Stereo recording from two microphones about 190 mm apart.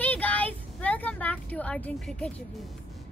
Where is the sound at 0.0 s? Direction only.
10° left (ahead or behind).